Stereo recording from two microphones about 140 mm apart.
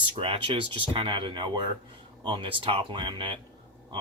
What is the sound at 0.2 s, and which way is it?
Speech, 40° right (ahead or behind).